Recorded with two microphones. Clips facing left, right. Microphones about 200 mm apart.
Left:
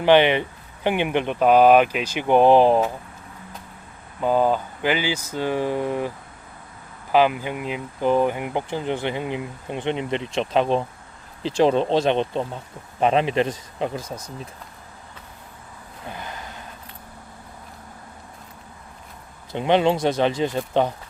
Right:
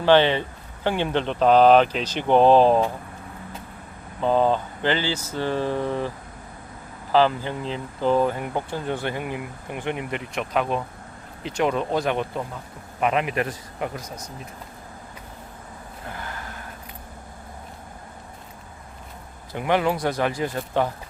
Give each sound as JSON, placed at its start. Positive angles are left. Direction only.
{"t": 0.0, "sound": "speech", "side_deg": 15}
{"t": 4.2, "sound": "speech", "side_deg": 10}
{"t": 7.1, "sound": "speech", "side_deg": 15}
{"t": 16.0, "sound": "gasp", "side_deg": 20}
{"t": 19.5, "sound": "speech", "side_deg": 25}